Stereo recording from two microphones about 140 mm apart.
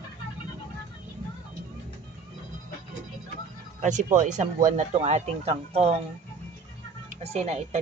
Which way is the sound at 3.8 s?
60° right (ahead or behind).